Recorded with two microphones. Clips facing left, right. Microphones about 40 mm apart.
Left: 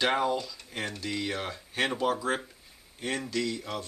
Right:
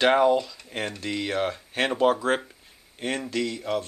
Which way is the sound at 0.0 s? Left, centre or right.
Right.